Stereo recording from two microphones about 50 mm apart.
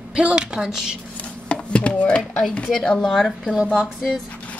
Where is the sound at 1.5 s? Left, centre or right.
Left.